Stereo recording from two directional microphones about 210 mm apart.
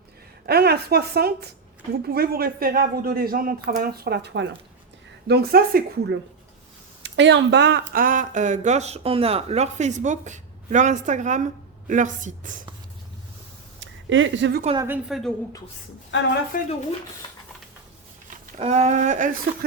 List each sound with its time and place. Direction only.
0.4 s speech: 50° right (ahead or behind)
7.0 s speech: 60° right (ahead or behind)
7.9 s speech: 40° right (ahead or behind)
13.7 s a sound: 65° right (ahead or behind)
14.8 s a woman's voice: 10° right (ahead or behind)
16.1 s a woman's voice: 55° left (ahead or behind)
16.5 s speech: 40° left (ahead or behind)
17.2 s a sound: 20° left (ahead or behind)
18.3 s speech: 30° right (ahead or behind)